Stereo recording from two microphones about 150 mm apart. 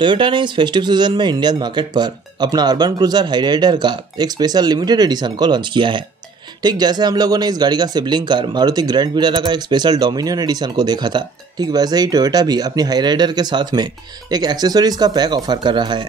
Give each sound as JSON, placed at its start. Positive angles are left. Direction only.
{"t": 0.0, "sound": "speech", "side_deg": -35}